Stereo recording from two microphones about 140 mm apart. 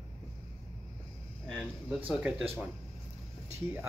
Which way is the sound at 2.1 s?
10° right (ahead or behind).